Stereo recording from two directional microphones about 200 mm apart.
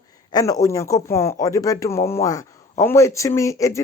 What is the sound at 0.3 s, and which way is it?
Speech, 20° left (ahead or behind).